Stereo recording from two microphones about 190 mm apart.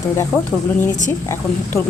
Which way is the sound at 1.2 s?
15° left (ahead or behind).